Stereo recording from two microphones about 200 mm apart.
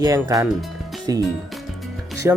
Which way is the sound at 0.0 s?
20° right (ahead or behind).